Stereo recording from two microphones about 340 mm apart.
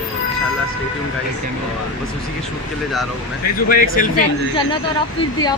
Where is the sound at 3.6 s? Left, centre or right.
Left.